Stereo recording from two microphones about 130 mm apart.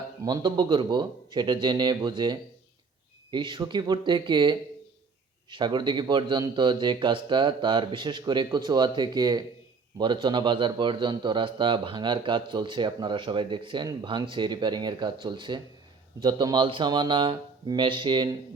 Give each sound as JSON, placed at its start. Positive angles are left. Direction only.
{"t": 0.2, "sound": "a man's voice", "side_deg": -30}